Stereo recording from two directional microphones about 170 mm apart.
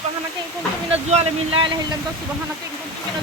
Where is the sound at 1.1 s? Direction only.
30° right (ahead or behind).